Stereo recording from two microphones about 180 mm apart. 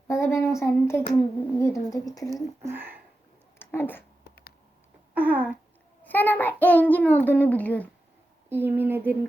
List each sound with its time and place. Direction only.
0.1 s a child's voice: 15° left (ahead or behind)
2.6 s speech: 10° right (ahead or behind)
3.6 s speech: 10° left (ahead or behind)
5.1 s speech: 10° right (ahead or behind)
6.0 s a child's voice: 10° left (ahead or behind)
8.4 s speech: 10° right (ahead or behind)